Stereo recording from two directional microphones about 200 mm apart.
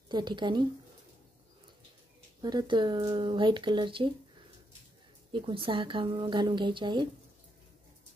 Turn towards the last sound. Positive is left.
turn(degrees=-25)  # may be behind; listen again after turning